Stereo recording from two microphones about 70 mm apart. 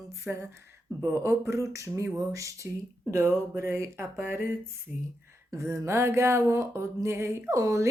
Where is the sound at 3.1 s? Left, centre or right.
Right.